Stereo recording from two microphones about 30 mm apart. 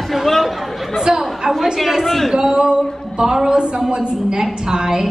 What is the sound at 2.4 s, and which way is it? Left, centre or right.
A woman's voice, right.